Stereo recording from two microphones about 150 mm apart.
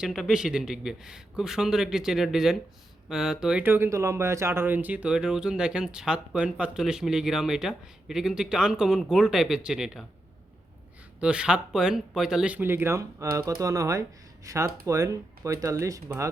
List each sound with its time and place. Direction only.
0.0 s speech: centre (ahead or behind)
11.2 s speech: 5° right (ahead or behind)